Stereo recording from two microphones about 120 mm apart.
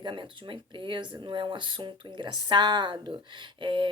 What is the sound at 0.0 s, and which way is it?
Speech, 40° right (ahead or behind).